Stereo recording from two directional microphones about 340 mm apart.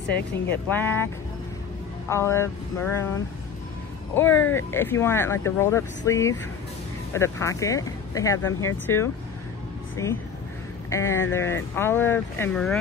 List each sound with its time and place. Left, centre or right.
0.5 s speech: centre
2.0 s speech: centre
4.1 s speech: centre
10.9 s speech: centre